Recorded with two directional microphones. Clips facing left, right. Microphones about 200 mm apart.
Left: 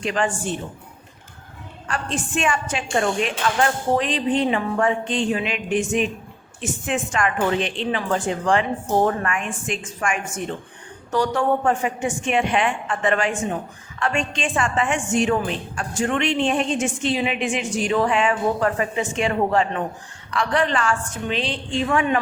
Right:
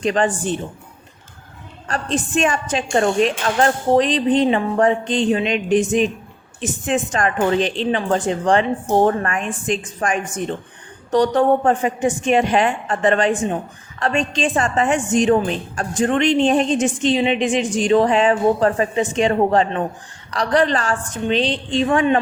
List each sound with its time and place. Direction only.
0.0 s a woman's voice: 35° right (ahead or behind)
2.1 s a woman's voice: 40° right (ahead or behind)